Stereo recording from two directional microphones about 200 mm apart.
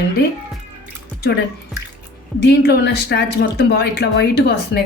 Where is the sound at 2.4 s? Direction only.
55° left (ahead or behind).